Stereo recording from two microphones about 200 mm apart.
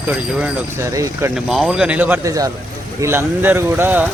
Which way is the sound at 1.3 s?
5° right (ahead or behind).